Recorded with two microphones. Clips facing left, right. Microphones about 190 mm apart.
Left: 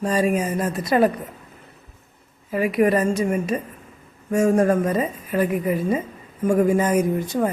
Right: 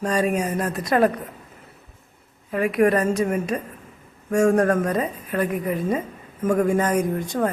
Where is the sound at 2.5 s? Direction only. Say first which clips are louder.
Even; centre (ahead or behind).